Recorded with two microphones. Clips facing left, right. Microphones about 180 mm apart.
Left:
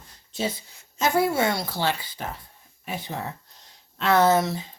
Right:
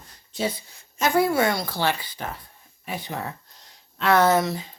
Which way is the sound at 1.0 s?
25° left (ahead or behind).